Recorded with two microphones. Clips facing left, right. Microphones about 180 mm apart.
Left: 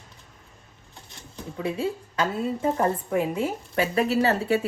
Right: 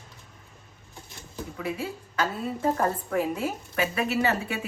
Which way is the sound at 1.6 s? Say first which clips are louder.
Left 5 dB; 25° left (ahead or behind).